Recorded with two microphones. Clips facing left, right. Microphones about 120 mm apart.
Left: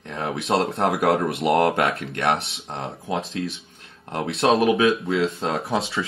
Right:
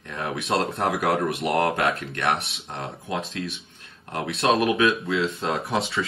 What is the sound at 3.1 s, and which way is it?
Speech, 25° left (ahead or behind).